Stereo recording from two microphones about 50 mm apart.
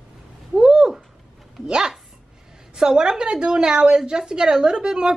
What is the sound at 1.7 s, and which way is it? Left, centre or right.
Dog, centre.